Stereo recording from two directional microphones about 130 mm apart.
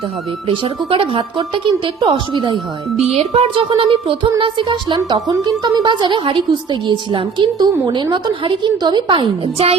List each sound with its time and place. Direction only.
0.4 s speech: 45° right (ahead or behind)